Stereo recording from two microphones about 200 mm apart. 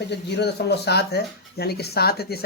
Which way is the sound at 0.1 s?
60° left (ahead or behind).